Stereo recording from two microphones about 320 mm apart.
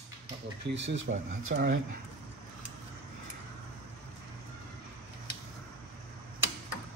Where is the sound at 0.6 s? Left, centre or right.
Right.